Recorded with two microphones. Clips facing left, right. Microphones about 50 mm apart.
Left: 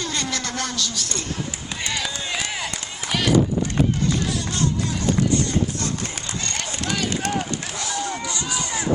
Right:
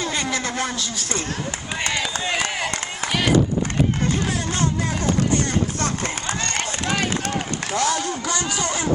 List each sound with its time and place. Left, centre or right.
0.0 s speech: centre
2.2 s run: right
5.3 s chopping: right
6.0 s run: right
7.7 s run: right
8.2 s a sound: right